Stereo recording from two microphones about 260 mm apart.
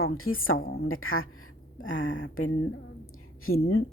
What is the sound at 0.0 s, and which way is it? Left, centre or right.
A woman's voice, left.